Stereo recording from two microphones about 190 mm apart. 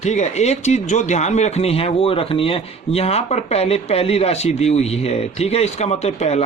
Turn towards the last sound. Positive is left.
turn(degrees=35)  # may be behind; listen again after turning